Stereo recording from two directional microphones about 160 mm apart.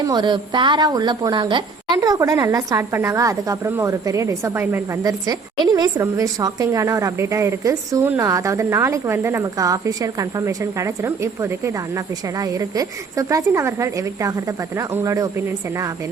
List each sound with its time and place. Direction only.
0.0 s a woman's voice: 25° right (ahead or behind)
5.0 s a woman's voice: 25° right (ahead or behind)